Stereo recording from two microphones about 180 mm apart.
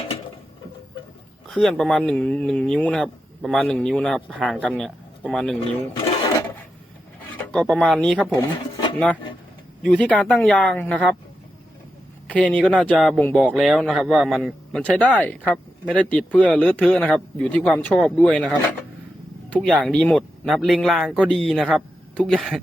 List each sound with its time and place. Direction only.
1.5 s speech: centre (ahead or behind)
6.3 s filing: 10° left (ahead or behind)
7.2 s speech: 10° left (ahead or behind)
8.5 s a sound: 25° left (ahead or behind)
9.8 s speech: 5° left (ahead or behind)
12.3 s speech: 5° left (ahead or behind)
19.8 s speech: 5° left (ahead or behind)